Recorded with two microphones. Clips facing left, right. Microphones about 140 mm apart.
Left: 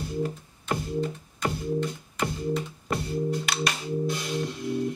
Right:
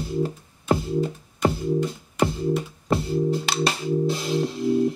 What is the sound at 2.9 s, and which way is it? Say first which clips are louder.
Music: right 6 dB; 30° right (ahead or behind).